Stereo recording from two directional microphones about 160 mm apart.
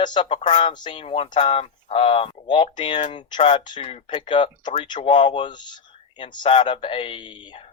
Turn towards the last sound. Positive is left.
turn(degrees=30)  # may be behind; listen again after turning